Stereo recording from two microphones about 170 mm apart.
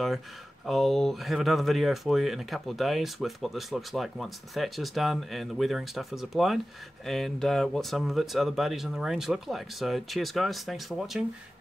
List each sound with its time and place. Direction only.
0.7 s speech: centre (ahead or behind)